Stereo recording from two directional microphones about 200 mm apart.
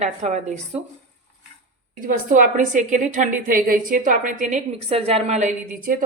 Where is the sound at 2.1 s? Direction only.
40° right (ahead or behind).